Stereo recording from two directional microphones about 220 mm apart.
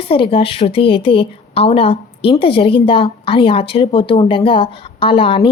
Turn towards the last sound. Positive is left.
turn(degrees=25)  # may be behind; listen again after turning